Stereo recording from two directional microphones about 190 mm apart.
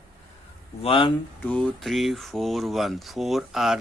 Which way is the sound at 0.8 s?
30° left (ahead or behind).